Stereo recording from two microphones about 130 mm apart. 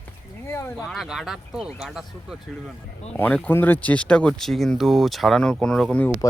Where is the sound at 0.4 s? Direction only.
20° left (ahead or behind).